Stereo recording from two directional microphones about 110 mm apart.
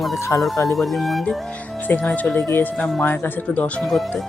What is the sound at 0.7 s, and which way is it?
Speech, centre (ahead or behind).